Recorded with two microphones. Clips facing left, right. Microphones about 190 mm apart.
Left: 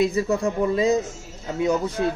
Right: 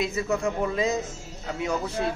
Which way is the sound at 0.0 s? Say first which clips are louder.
Left 5 dB; 35° left (ahead or behind).